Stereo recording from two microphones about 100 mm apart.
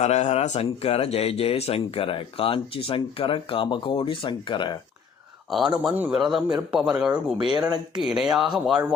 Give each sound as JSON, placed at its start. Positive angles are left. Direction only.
{"t": 0.2, "sound": "speech", "side_deg": 90}
{"t": 5.5, "sound": "speech", "side_deg": -5}
{"t": 5.9, "sound": "a man's voice", "side_deg": -20}
{"t": 6.3, "sound": "a man's voice", "side_deg": -5}